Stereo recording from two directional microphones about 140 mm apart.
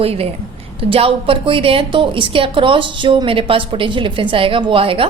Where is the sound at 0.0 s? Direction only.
45° right (ahead or behind).